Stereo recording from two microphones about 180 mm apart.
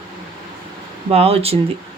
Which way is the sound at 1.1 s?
35° right (ahead or behind).